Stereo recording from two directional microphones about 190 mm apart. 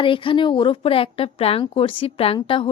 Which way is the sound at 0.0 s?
25° left (ahead or behind).